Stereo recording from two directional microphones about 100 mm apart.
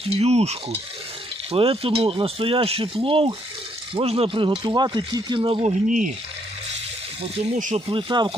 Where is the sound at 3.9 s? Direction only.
85° right; by 4.5 s 60° right (ahead or behind).